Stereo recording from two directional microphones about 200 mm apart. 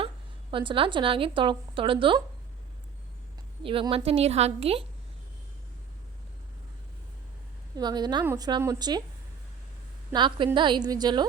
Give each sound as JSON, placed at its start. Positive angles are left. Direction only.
{"t": 0.5, "sound": "a woman's voice", "side_deg": -25}
{"t": 3.6, "sound": "a woman's voice", "side_deg": -25}
{"t": 7.8, "sound": "a woman's voice", "side_deg": -20}
{"t": 10.1, "sound": "a woman's voice", "side_deg": -25}